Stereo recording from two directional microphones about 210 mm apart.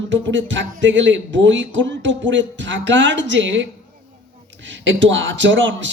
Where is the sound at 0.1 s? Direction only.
60° right (ahead or behind).